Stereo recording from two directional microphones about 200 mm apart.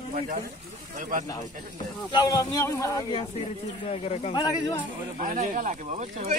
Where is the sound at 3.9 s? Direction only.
35° left (ahead or behind).